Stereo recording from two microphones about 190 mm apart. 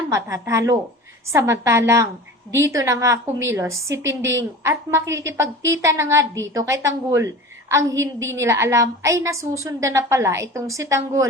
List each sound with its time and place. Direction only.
0.1 s a woman's voice: 15° right (ahead or behind)
4.1 s a woman's voice: 75° right (ahead or behind)
4.6 s a woman's voice: 15° right (ahead or behind)